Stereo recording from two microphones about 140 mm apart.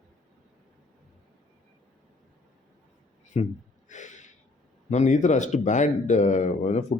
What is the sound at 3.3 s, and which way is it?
Speech, 50° left (ahead or behind).